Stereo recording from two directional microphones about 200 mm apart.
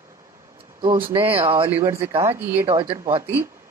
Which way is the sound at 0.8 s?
25° right (ahead or behind).